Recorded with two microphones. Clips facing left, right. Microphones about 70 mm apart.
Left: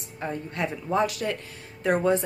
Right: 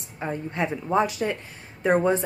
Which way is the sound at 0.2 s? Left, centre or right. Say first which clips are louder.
Right 2 dB; centre.